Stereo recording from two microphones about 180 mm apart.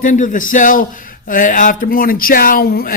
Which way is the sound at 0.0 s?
45° left (ahead or behind).